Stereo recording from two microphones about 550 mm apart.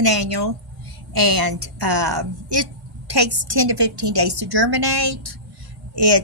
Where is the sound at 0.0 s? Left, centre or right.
Right.